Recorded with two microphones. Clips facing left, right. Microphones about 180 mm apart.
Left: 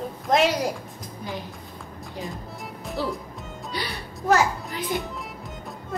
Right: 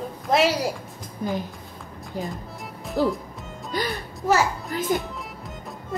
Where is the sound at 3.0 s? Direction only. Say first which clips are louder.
Right 7 dB; 45° right (ahead or behind).